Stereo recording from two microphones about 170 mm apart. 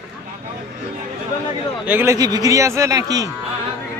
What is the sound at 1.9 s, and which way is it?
A man's voice, 15° right (ahead or behind).